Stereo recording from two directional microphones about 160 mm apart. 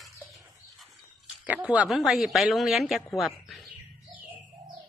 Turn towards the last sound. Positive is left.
turn(degrees=0)  # may be behind; listen again after turning